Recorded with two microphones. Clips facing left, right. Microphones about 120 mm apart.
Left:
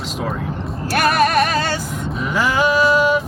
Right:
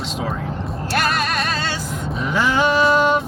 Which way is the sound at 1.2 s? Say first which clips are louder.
Left 7 dB; 55° left (ahead or behind).